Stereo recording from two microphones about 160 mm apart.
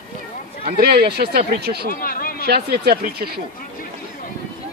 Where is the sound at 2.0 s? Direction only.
65° left (ahead or behind).